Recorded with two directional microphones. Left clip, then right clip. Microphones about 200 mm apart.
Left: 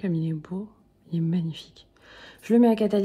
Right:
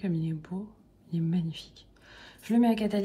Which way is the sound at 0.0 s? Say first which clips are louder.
Left 4 dB; 25° left (ahead or behind).